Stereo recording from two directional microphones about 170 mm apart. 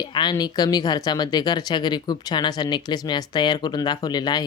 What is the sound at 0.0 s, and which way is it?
Speech, 25° left (ahead or behind).